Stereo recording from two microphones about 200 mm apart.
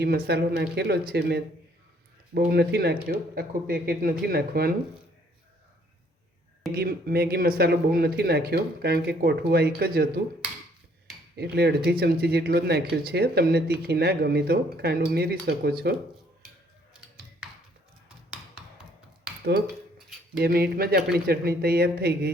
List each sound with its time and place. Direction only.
0.0 s speech: 50° right (ahead or behind)
6.7 s speech: 50° right (ahead or behind)
11.3 s speech: 55° right (ahead or behind)
20.4 s speech: 50° right (ahead or behind)